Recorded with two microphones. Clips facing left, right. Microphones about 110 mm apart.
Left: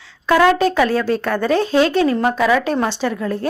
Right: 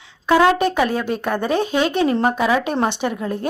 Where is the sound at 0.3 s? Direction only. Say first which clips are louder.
Left 1 dB; 20° right (ahead or behind).